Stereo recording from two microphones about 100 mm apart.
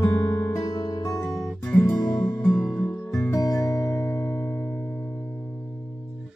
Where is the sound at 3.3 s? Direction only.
35° left (ahead or behind).